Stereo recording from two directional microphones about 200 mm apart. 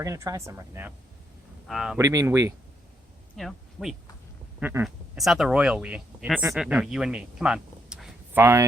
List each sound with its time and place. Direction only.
0.0 s speech: 15° right (ahead or behind)
1.6 s speech: centre (ahead or behind)
2.0 s speech: 15° right (ahead or behind)
3.3 s speech: centre (ahead or behind)